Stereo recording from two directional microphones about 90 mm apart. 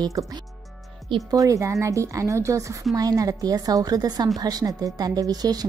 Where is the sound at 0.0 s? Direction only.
45° right (ahead or behind).